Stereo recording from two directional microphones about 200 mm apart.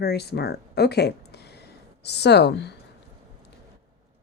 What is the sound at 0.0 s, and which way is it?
Speech, 55° left (ahead or behind).